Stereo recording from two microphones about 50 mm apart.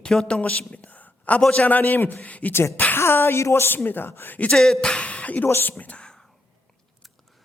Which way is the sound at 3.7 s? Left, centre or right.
Left.